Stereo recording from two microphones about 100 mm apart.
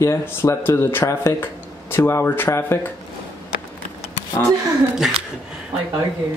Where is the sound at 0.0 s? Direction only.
30° left (ahead or behind).